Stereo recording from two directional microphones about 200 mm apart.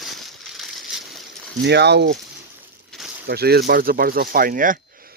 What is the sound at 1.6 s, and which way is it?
Speech, 55° right (ahead or behind).